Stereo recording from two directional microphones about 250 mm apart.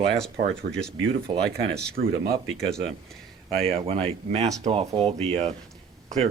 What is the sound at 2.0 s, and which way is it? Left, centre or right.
Speech, right.